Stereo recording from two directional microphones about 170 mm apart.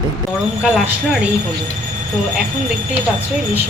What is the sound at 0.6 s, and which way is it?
Speech, centre (ahead or behind).